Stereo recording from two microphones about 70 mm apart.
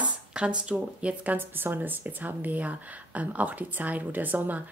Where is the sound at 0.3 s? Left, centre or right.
Centre.